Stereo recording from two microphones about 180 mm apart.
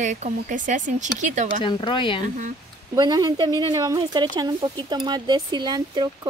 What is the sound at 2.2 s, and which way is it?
Speech, 45° right (ahead or behind).